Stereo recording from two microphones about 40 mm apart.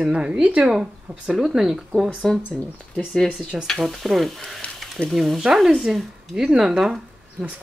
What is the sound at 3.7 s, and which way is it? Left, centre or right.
Stir, centre.